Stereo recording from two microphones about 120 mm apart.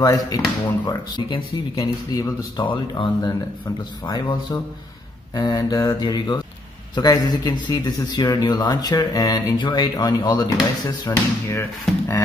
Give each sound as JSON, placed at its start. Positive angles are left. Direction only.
{"t": 0.0, "sound": "speech", "side_deg": 30}
{"t": 11.1, "sound": "speech", "side_deg": 20}